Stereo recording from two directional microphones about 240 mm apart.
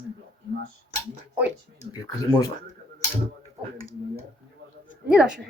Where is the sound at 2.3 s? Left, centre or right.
Centre.